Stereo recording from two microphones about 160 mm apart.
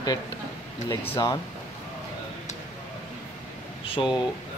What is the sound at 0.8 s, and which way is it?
Speech, 20° left (ahead or behind).